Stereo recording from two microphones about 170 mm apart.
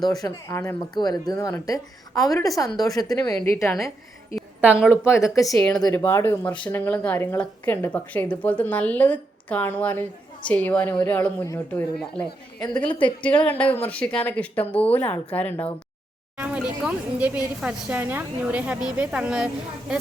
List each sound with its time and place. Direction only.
0.2 s a woman's voice: 20° left (ahead or behind)
4.4 s a woman's voice: 5° right (ahead or behind)
5.1 s a woman's voice: 20° left (ahead or behind)
5.5 s speech: 5° left (ahead or behind)
5.9 s speech: 15° left (ahead or behind)
12.6 s a woman's voice: 25° left (ahead or behind)
13.4 s speech: 10° left (ahead or behind)
16.4 s a woman's voice: 10° right (ahead or behind)